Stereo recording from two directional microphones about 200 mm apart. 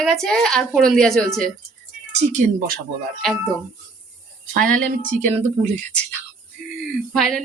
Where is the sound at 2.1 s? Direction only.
40° right (ahead or behind).